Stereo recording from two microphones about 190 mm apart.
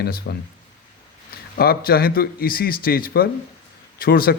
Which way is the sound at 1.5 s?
55° left (ahead or behind).